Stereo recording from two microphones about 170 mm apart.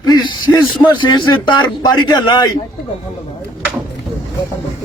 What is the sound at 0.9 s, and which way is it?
A man's voice, 30° left (ahead or behind).